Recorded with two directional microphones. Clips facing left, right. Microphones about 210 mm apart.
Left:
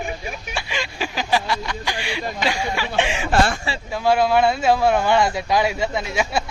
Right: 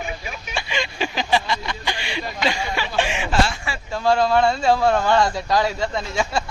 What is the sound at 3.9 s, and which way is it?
Speech, 5° left (ahead or behind).